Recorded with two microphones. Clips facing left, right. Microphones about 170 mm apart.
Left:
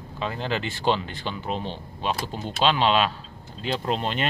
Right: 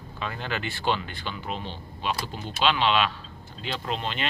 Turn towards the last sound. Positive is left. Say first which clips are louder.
# left 4 dB
turn(degrees=40)  # may be behind; listen again after turning